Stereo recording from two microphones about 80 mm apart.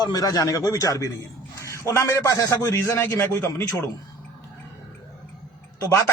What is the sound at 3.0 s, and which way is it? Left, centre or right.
Speech, left.